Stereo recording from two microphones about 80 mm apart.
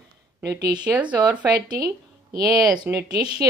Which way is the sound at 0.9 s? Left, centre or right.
Centre.